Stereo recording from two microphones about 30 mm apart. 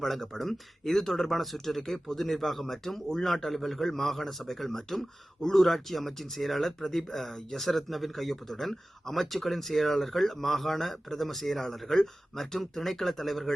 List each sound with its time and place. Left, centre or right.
0.3 s a man's voice: centre